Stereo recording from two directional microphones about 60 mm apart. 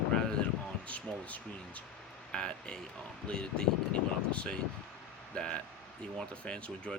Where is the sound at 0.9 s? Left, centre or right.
Left.